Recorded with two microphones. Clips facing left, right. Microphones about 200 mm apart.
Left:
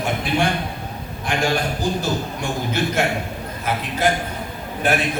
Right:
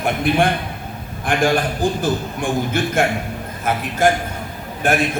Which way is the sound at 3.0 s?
50° right (ahead or behind).